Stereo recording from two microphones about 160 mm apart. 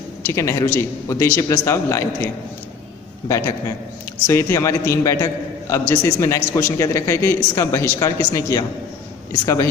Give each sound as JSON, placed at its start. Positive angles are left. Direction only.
{"t": 0.3, "sound": "a man's voice", "side_deg": 15}